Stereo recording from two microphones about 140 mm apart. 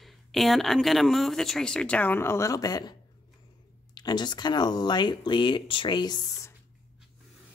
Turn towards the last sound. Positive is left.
turn(degrees=30)  # may be behind; listen again after turning